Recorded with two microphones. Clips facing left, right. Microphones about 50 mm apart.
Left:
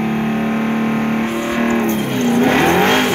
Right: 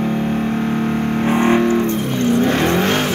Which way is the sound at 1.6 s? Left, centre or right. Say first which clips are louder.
Even; left.